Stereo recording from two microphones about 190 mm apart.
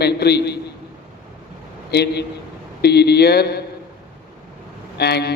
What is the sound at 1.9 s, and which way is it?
A man's voice, 60° left (ahead or behind).